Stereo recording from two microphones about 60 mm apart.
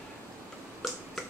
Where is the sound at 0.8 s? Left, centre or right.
Centre.